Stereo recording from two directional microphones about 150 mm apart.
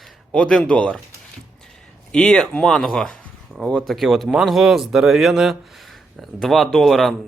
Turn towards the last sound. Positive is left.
turn(degrees=0)  # may be behind; listen again after turning